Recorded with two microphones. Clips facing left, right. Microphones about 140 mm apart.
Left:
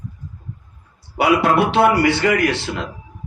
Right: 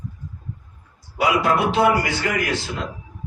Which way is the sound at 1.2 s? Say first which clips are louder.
Left 4 dB; 65° left (ahead or behind).